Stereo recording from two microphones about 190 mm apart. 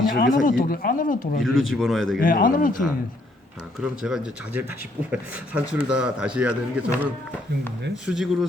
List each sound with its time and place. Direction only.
0.4 s speech: 45° left (ahead or behind)
1.4 s a man's voice: centre (ahead or behind)
2.2 s speech: 45° left (ahead or behind)
3.8 s a man's voice: 5° right (ahead or behind)